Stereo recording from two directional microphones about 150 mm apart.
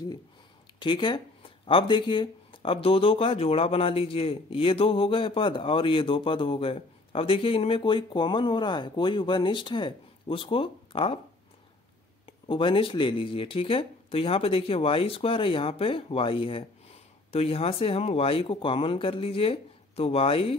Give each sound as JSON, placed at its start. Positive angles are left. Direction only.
{"t": 0.7, "sound": "speech", "side_deg": 30}
{"t": 12.3, "sound": "speech", "side_deg": 35}